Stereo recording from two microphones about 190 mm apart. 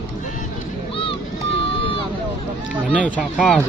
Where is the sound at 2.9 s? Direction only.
5° left (ahead or behind).